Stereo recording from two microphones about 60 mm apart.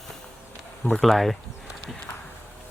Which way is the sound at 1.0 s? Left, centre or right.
Centre.